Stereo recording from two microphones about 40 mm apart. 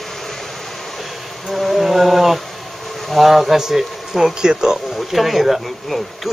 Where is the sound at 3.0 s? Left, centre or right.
Centre.